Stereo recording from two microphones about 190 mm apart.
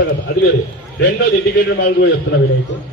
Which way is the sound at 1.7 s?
70° left (ahead or behind).